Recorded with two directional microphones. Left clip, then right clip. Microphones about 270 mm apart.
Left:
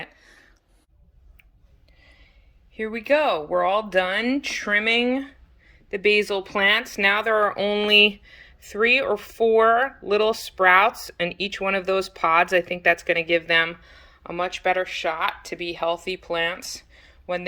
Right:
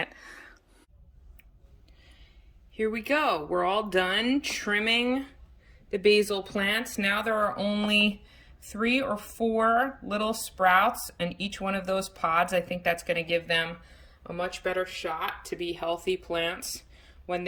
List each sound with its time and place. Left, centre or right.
0.0 s a sound: centre
2.7 s speech: centre
6.9 s speech: left
7.4 s speech: centre
14.6 s speech: centre